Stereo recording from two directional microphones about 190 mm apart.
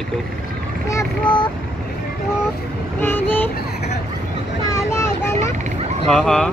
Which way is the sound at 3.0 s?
10° left (ahead or behind).